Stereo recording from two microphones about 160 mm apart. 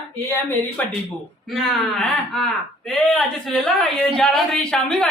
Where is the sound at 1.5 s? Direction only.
Centre (ahead or behind).